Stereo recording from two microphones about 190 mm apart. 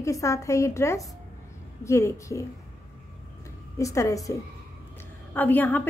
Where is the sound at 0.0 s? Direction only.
15° left (ahead or behind).